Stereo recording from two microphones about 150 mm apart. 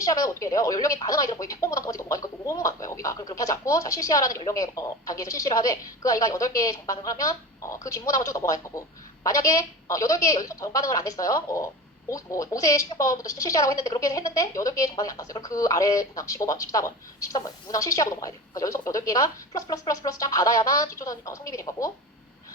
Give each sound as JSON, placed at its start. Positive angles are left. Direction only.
{"t": 0.0, "sound": "speech", "side_deg": 20}